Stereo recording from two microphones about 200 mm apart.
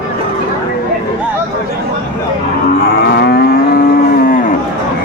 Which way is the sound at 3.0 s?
55° left (ahead or behind).